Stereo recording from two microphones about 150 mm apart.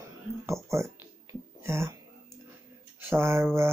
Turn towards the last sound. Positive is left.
turn(degrees=-15)  # may be behind; listen again after turning